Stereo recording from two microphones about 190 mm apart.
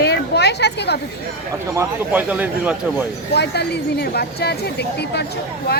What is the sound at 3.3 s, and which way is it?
Speech, 60° left (ahead or behind).